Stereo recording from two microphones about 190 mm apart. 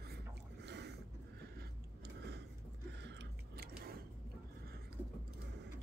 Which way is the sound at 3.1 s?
60° right (ahead or behind).